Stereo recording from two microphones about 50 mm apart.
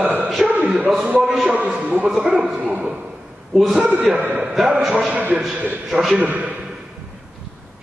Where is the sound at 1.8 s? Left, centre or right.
Right.